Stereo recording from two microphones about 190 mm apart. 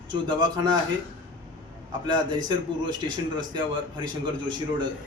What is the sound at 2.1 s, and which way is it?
A man's voice, 20° right (ahead or behind).